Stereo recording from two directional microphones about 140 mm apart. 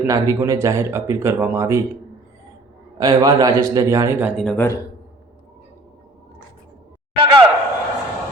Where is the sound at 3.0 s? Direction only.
30° right (ahead or behind).